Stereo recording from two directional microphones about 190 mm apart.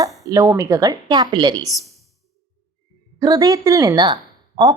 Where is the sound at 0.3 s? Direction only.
15° right (ahead or behind).